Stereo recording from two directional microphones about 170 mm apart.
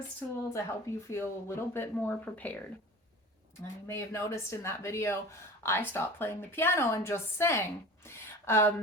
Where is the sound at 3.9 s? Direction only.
15° left (ahead or behind).